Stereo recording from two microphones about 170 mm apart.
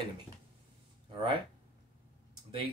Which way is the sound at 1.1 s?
25° right (ahead or behind).